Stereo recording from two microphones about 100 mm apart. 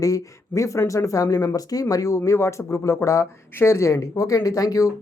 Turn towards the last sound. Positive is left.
turn(degrees=35)  # may be behind; listen again after turning